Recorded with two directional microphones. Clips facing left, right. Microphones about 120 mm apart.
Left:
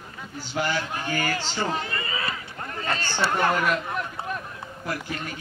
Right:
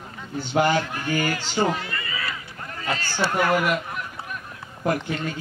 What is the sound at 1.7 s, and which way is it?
Run, 30° left (ahead or behind).